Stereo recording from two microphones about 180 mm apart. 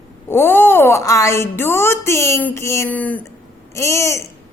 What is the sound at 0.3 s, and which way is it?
A woman's voice, 10° left (ahead or behind).